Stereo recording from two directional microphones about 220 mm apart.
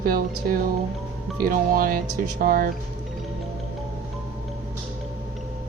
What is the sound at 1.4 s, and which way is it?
Speech, 40° right (ahead or behind).